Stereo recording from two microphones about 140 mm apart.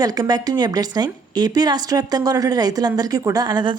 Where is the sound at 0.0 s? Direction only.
30° right (ahead or behind).